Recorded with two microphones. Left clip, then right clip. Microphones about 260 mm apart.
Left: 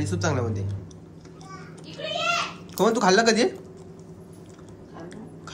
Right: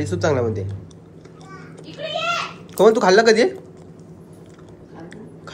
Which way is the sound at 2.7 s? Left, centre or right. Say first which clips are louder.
Right 7 dB; centre.